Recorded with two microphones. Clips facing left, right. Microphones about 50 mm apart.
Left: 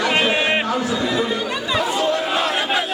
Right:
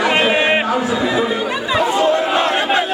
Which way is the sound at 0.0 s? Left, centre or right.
Centre.